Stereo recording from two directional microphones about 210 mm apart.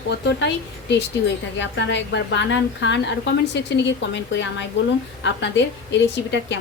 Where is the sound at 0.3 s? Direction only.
55° left (ahead or behind).